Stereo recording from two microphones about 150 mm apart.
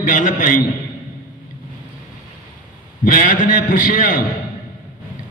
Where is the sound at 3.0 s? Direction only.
65° left (ahead or behind).